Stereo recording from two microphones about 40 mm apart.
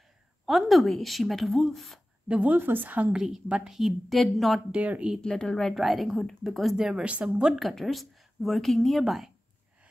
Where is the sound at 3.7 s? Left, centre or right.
Centre.